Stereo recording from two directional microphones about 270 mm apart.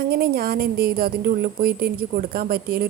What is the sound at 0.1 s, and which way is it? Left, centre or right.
A woman's voice, right.